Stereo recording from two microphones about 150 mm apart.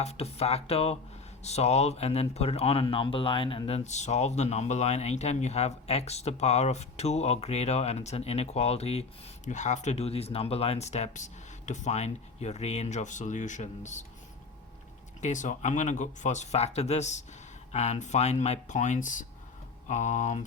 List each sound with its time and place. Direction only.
0.0 s speech: 45° left (ahead or behind)
15.2 s speech: 55° left (ahead or behind)